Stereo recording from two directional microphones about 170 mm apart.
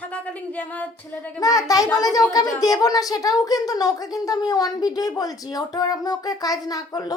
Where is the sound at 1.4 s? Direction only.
20° left (ahead or behind).